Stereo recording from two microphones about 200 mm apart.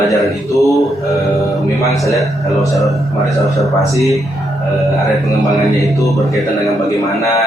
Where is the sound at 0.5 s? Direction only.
15° left (ahead or behind).